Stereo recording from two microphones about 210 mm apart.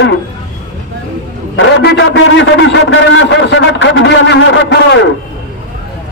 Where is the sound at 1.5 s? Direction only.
55° left (ahead or behind).